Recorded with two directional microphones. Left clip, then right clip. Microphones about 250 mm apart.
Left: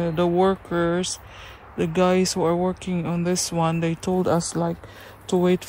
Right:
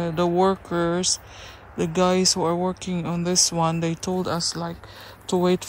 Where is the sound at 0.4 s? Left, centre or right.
Centre.